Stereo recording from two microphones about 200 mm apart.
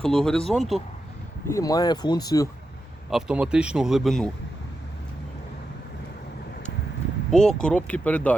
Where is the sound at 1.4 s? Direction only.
15° left (ahead or behind).